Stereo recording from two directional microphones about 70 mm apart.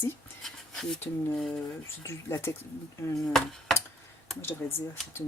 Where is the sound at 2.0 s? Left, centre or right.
Left.